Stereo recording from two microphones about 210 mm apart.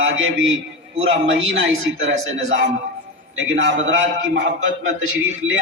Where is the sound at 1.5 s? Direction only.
65° right (ahead or behind).